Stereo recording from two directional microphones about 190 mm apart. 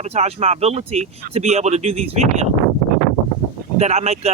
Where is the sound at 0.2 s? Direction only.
35° right (ahead or behind).